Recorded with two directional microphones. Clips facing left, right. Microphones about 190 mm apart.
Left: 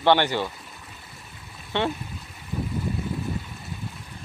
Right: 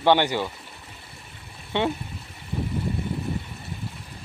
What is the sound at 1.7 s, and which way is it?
Speech, 15° right (ahead or behind).